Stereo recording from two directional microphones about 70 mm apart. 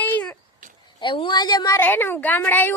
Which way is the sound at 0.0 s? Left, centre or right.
Left.